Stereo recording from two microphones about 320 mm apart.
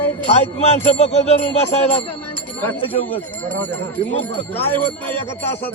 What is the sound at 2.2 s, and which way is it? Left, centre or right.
Speech, centre.